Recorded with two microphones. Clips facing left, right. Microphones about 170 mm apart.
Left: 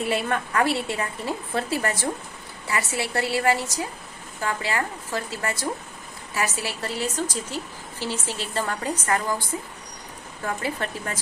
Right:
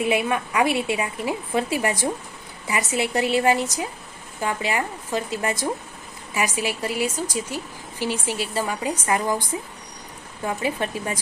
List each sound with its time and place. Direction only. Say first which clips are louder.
0.0 s a woman's voice: right 3 dB; 15° right (ahead or behind)